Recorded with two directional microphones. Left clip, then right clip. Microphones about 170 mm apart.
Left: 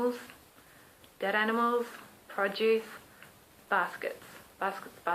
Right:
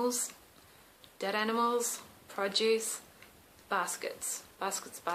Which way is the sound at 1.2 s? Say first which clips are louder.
Left 2 dB; 40° right (ahead or behind).